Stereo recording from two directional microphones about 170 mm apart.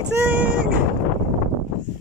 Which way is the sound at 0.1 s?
10° right (ahead or behind).